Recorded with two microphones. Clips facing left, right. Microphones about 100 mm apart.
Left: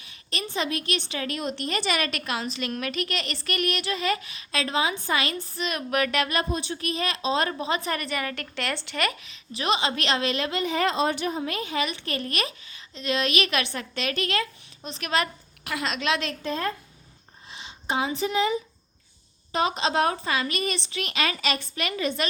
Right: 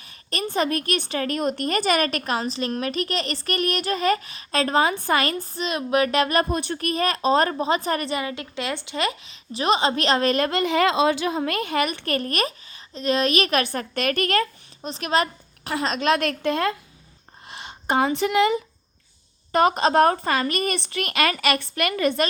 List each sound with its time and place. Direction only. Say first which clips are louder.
0.0 s a woman's voice: right 5 dB; 45° right (ahead or behind)
5.6 s speech: right 4 dB; 30° right (ahead or behind)
8.2 s a woman's voice: right 2 dB; 20° right (ahead or behind)
9.3 s a woman's voice: right 4 dB; 35° right (ahead or behind); by 16.7 s 70° right (ahead or behind)
17.5 s speech: right 5 dB; 55° right (ahead or behind)
19.5 s a woman's voice: right 6 dB; 50° right (ahead or behind)